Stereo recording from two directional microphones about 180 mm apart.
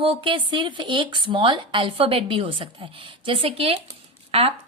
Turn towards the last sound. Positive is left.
turn(degrees=-35)  # may be behind; listen again after turning